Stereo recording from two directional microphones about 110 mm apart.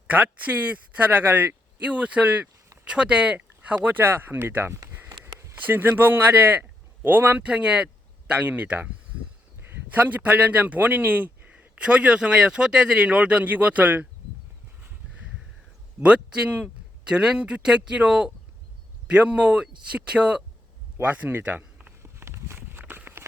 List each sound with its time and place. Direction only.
0.1 s speech: 15° right (ahead or behind)
5.3 s a sound: 25° right (ahead or behind)
5.5 s speech: 15° right (ahead or behind)
16.0 s speech: 10° right (ahead or behind)
22.0 s walk: 25° right (ahead or behind)